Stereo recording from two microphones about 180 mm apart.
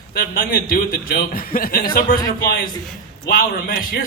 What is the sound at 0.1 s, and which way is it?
A man's voice, 55° left (ahead or behind).